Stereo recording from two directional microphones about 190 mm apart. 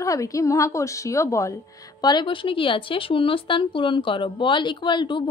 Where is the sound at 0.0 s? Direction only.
15° left (ahead or behind).